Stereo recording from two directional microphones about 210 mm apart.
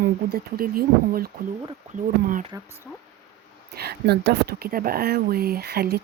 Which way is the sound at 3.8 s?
50° right (ahead or behind).